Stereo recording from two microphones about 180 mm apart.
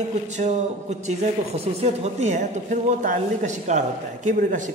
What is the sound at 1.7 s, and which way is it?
A man's voice, 40° right (ahead or behind).